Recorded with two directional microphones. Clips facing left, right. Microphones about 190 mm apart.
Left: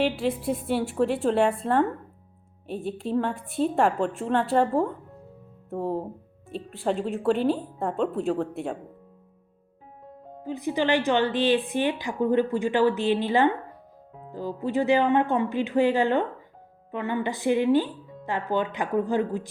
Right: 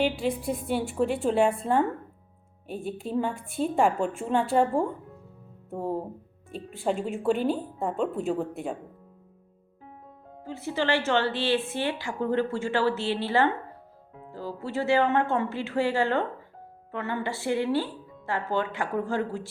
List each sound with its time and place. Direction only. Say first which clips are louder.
0.0 s speech: left 1 dB; 5° left (ahead or behind)
10.4 s a woman's voice: left 3 dB; 15° left (ahead or behind)